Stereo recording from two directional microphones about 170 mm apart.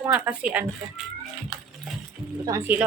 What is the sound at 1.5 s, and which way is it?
Pig, 5° right (ahead or behind).